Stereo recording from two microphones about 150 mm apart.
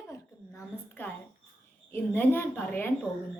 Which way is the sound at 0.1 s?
15° left (ahead or behind).